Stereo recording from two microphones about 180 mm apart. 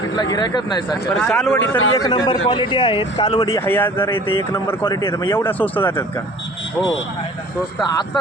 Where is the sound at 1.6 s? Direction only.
90° left.